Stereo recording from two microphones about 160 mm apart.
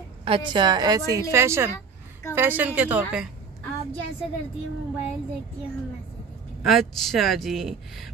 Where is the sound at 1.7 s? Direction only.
15° left (ahead or behind).